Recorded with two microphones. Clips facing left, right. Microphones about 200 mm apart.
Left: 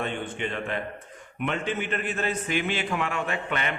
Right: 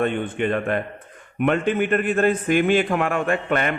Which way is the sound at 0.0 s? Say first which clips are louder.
Right 8 dB; 55° right (ahead or behind).